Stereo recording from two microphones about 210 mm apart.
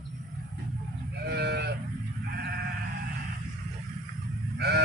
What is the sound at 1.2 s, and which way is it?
Livestock, 50° right (ahead or behind).